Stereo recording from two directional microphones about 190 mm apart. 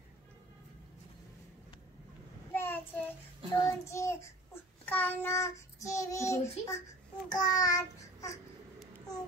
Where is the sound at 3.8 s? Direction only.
15° left (ahead or behind).